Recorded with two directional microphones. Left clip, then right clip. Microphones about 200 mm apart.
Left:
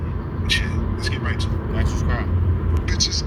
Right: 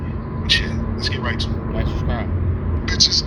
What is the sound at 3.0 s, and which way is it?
Speech, 45° right (ahead or behind).